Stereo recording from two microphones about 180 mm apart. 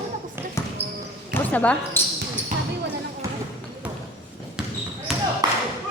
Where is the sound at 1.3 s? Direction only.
10° left (ahead or behind).